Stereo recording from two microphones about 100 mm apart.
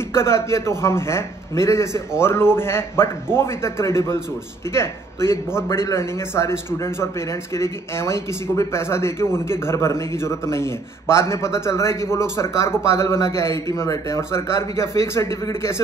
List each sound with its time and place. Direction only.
0.1 s a man's voice: 25° left (ahead or behind)